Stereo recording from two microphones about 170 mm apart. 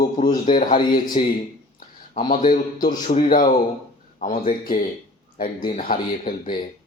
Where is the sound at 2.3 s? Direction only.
50° left (ahead or behind).